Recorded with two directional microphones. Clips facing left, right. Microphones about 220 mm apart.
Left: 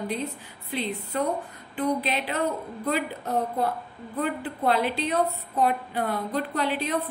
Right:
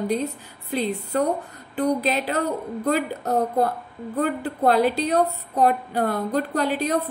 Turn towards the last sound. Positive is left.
turn(degrees=-40)  # may be behind; listen again after turning